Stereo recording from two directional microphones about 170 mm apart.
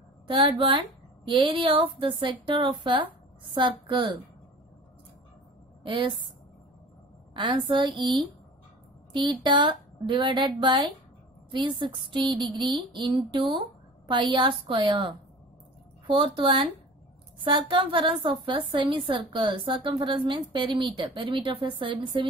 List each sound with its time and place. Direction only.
0.3 s a woman's voice: 30° right (ahead or behind)
5.9 s a woman's voice: 30° right (ahead or behind)
7.3 s a woman's voice: 25° right (ahead or behind)